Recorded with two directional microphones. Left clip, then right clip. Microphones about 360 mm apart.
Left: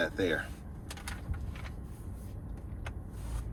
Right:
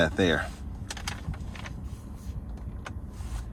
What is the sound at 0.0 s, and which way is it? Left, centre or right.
Speech, centre.